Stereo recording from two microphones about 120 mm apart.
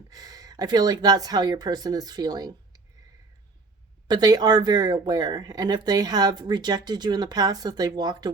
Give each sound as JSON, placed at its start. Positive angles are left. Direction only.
{"t": 0.1, "sound": "speech", "side_deg": -30}
{"t": 4.1, "sound": "speech", "side_deg": -35}